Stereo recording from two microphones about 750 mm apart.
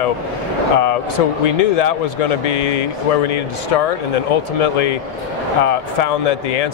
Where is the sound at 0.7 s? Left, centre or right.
Left.